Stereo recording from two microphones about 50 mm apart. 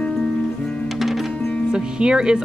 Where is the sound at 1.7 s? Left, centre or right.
Centre.